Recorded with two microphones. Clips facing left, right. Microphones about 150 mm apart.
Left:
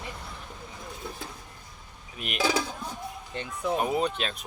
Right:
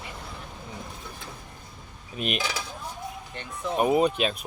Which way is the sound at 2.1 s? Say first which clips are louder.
Right 7 dB; 20° right (ahead or behind).